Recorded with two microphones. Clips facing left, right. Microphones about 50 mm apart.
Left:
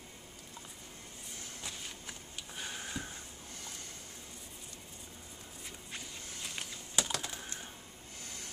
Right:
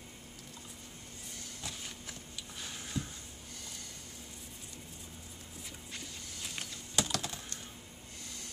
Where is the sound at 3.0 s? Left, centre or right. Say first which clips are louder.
Right 5 dB; centre.